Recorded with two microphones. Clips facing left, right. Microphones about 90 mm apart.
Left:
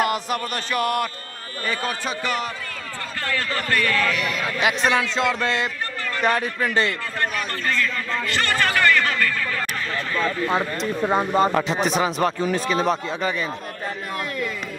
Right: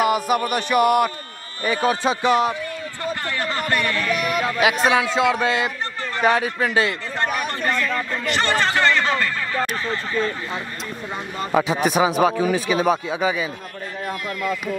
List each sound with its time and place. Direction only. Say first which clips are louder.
0.0 s speech: right 4 dB; 5° right (ahead or behind)
4.8 s speech: right 2 dB; 10° right (ahead or behind)
7.3 s a sound: right 2 dB; 20° right (ahead or behind)
11.0 s speech: left 11 dB; 50° left (ahead or behind)
11.5 s speech: right 2 dB; 10° right (ahead or behind)